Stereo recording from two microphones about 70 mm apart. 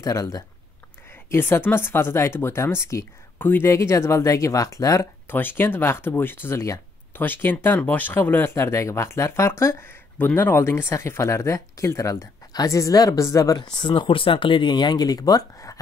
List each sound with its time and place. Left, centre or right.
0.0 s speech: left
1.3 s speech: left
3.3 s speech: left
3.7 s speech: left
5.3 s speech: left
8.5 s speech: left
10.1 s speech: left
14.7 s speech: left